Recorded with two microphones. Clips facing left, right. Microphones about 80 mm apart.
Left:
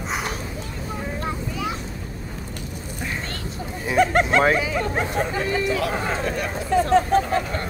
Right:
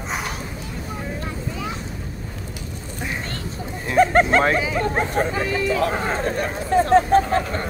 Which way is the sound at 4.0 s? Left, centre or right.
Right.